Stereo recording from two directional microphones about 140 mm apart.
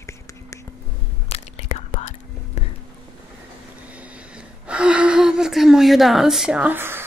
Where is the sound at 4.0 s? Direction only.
10° right (ahead or behind).